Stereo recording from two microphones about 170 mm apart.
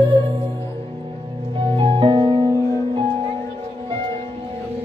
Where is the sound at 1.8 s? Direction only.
30° right (ahead or behind).